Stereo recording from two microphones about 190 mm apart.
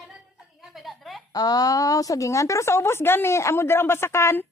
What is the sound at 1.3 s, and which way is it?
A woman's voice, 20° left (ahead or behind).